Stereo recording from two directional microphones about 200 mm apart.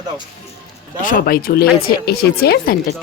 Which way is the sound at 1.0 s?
45° left (ahead or behind).